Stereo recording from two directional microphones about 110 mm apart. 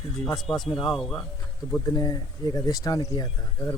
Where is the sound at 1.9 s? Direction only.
35° left (ahead or behind).